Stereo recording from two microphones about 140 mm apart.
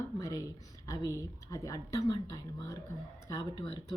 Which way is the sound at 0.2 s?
25° left (ahead or behind).